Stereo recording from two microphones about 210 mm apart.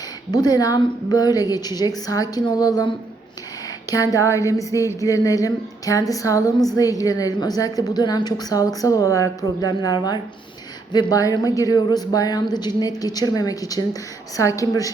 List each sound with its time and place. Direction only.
0.3 s a woman's voice: 20° left (ahead or behind)